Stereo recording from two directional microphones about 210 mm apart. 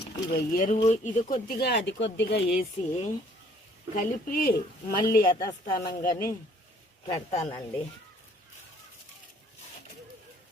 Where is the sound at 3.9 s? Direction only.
40° left (ahead or behind).